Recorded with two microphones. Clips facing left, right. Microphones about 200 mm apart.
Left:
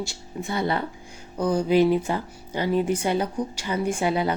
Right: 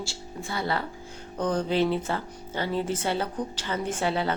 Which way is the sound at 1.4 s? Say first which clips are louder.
Left 5 dB; 10° left (ahead or behind).